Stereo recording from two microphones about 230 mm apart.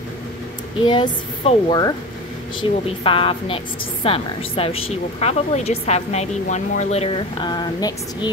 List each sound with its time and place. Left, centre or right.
0.8 s a woman's voice: left